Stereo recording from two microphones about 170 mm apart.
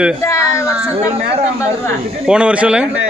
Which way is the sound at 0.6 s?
5° right (ahead or behind).